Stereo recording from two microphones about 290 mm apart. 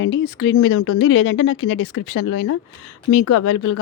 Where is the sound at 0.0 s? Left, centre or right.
Left.